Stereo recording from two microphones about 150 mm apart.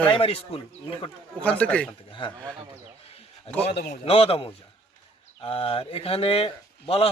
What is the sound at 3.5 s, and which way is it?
Speech, 45° left (ahead or behind).